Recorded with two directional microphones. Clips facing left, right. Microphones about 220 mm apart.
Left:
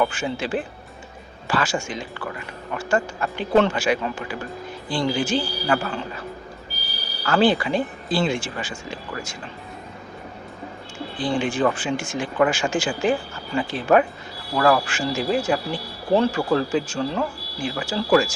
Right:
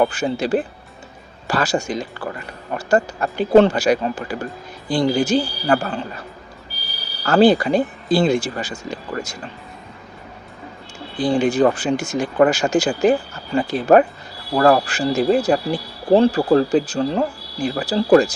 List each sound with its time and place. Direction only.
0.0 s speech: 40° right (ahead or behind)
7.3 s speech: 40° right (ahead or behind)
11.2 s speech: 40° right (ahead or behind)